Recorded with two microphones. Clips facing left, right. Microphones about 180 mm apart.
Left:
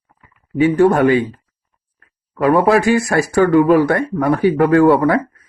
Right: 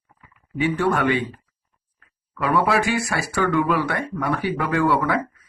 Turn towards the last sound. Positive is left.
turn(degrees=45)  # may be behind; listen again after turning